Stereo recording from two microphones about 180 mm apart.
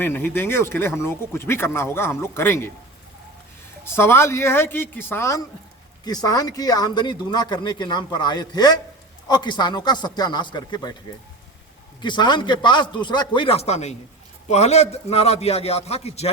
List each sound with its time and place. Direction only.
0.0 s speech: 10° left (ahead or behind)
3.8 s speech: 15° left (ahead or behind)
12.0 s a man's voice: 25° left (ahead or behind)